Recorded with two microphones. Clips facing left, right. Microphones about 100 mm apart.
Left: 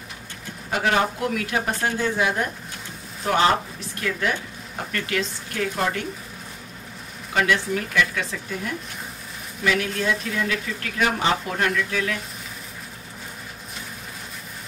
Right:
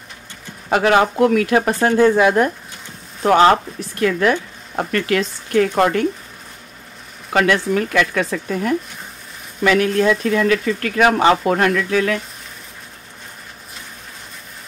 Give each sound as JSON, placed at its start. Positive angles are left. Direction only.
{"t": 0.7, "sound": "speech", "side_deg": -75}
{"t": 1.3, "sound": "speech", "side_deg": -65}
{"t": 7.3, "sound": "speech", "side_deg": -65}
{"t": 10.0, "sound": "speech", "side_deg": -85}